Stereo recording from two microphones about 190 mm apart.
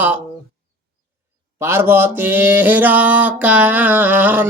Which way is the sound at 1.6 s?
10° right (ahead or behind).